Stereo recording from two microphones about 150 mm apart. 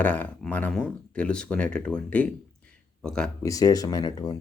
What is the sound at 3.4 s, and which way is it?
Speech, 25° left (ahead or behind).